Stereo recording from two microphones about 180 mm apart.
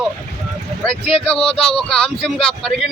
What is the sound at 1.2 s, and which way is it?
Speech, 5° left (ahead or behind).